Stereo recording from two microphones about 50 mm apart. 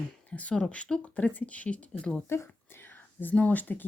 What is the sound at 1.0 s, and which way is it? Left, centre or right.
Speech, left.